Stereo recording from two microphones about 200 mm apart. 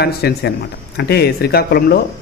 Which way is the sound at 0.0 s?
55° left (ahead or behind).